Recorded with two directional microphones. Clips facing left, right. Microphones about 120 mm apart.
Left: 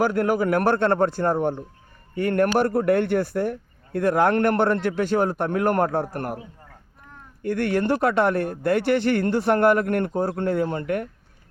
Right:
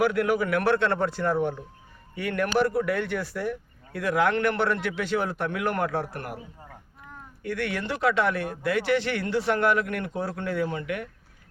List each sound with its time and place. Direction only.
0.0 s speech: 40° left (ahead or behind)
7.4 s speech: 45° left (ahead or behind)